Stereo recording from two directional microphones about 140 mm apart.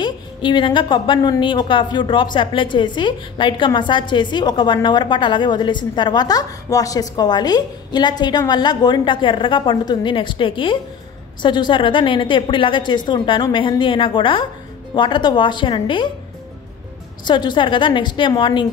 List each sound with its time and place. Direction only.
0.0 s a woman's voice: 35° left (ahead or behind)
17.2 s a woman's voice: 35° left (ahead or behind)